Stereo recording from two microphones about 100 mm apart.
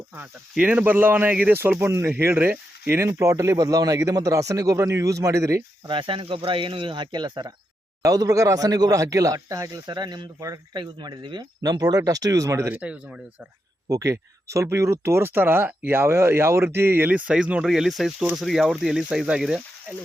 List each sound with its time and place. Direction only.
0.5 s speech: 10° right (ahead or behind); by 5.6 s 30° right (ahead or behind)
5.9 s speech: 60° right (ahead or behind)
8.0 s speech: 35° right (ahead or behind)
12.6 s speech: 15° right (ahead or behind)
14.0 s speech: 30° right (ahead or behind); by 19.6 s 5° right (ahead or behind)